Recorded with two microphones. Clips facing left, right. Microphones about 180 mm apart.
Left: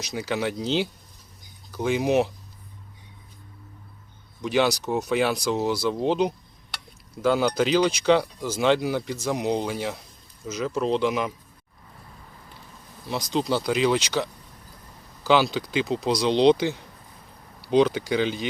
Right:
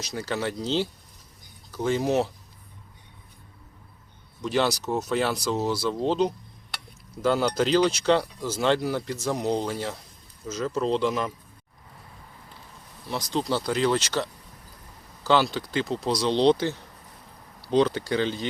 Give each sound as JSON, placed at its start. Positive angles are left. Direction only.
{"t": 0.0, "sound": "speech", "side_deg": 10}
{"t": 4.4, "sound": "speech", "side_deg": 10}
{"t": 9.3, "sound": "speech", "side_deg": 10}
{"t": 13.1, "sound": "speech", "side_deg": 15}